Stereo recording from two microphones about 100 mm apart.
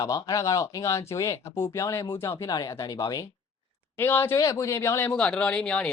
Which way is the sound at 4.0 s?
20° left (ahead or behind).